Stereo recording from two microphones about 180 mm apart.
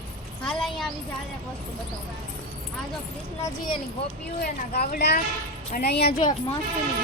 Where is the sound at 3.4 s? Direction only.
25° left (ahead or behind).